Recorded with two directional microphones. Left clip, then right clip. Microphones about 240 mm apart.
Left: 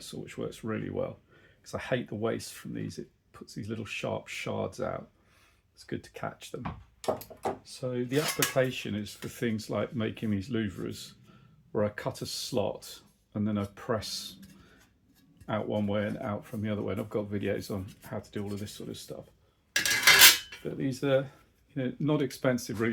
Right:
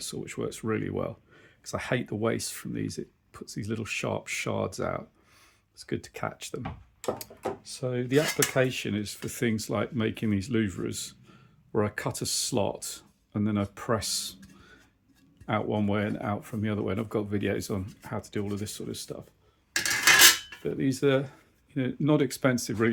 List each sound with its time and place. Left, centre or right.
0.0 s speech: right
15.4 s speech: right
19.7 s cutlery: centre
20.7 s speech: right